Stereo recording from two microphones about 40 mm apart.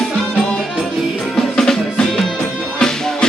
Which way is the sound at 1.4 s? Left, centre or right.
Centre.